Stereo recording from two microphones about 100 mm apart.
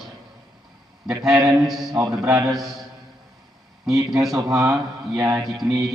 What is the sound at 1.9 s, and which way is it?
Speech, 35° right (ahead or behind).